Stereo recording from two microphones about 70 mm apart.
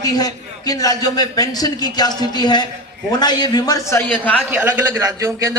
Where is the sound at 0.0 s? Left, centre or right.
Left.